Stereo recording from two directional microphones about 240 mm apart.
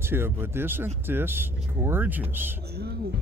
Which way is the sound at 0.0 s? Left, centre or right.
Centre.